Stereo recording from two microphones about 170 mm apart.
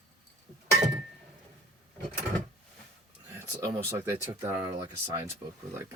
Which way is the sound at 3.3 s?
20° right (ahead or behind).